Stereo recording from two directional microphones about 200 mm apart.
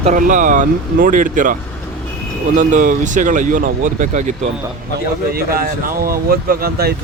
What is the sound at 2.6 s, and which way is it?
Speech, 40° right (ahead or behind).